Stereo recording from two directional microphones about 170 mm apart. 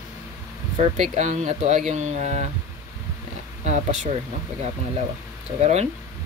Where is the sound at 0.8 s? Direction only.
45° right (ahead or behind).